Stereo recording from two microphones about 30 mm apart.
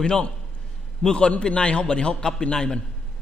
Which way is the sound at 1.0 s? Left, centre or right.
Left.